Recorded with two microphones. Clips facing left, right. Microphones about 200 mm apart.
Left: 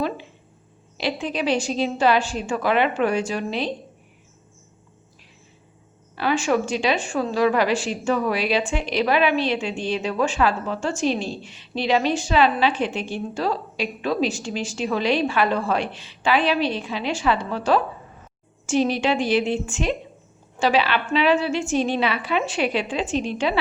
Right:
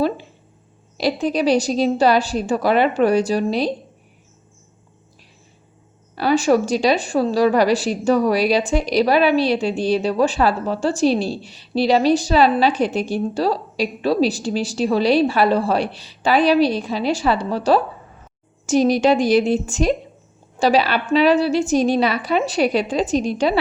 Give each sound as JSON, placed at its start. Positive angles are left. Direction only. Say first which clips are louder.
{"t": 0.9, "sound": "a woman's voice", "louder": "right 6 dB", "side_deg": -40}
{"t": 6.1, "sound": "a woman's voice", "louder": "right 5 dB", "side_deg": -40}